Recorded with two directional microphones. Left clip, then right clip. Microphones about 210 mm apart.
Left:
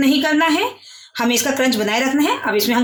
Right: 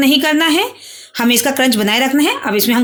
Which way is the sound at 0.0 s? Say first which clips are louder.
Right 3 dB; 45° right (ahead or behind).